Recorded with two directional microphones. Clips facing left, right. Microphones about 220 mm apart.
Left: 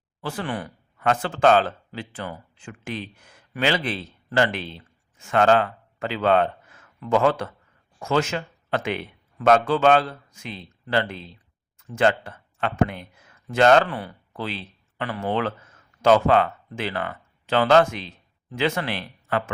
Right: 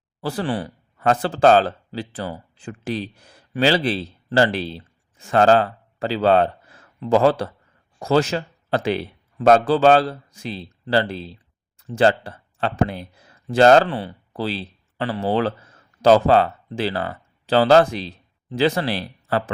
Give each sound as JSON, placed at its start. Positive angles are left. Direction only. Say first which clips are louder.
{"t": 0.2, "sound": "speech", "louder": "right 5 dB", "side_deg": -35}